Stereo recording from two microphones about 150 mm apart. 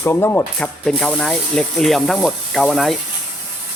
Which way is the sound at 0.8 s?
5° left (ahead or behind).